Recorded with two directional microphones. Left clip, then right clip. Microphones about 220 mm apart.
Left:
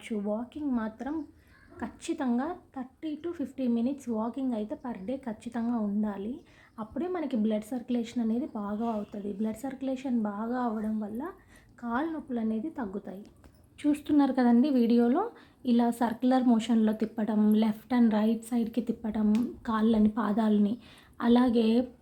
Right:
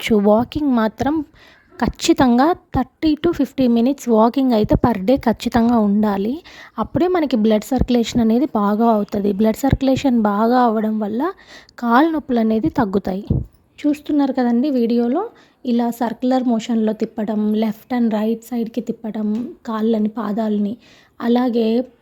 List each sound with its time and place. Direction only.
0.0 s a woman's voice: 50° right (ahead or behind)
13.8 s a woman's voice: 30° right (ahead or behind)